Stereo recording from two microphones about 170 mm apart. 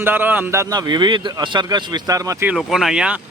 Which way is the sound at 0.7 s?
25° right (ahead or behind).